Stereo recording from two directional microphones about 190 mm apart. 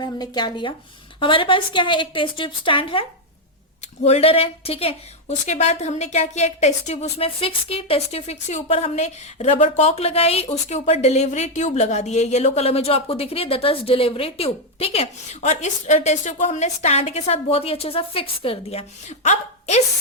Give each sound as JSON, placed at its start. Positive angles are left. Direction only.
{"t": 0.0, "sound": "a woman's voice", "side_deg": 20}